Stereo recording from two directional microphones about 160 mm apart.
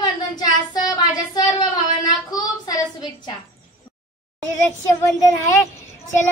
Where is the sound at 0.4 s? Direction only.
25° left (ahead or behind).